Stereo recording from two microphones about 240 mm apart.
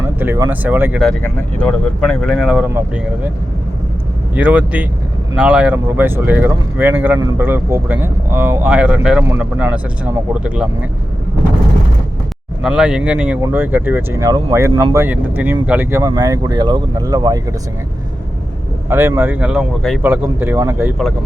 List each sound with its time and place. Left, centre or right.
0.0 s speech: centre
4.4 s speech: centre
12.6 s speech: centre
18.9 s speech: centre